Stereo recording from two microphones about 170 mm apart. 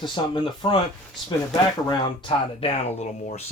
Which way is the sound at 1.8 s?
30° left (ahead or behind).